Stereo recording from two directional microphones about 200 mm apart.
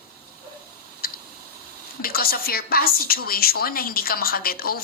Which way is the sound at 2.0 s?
50° left (ahead or behind).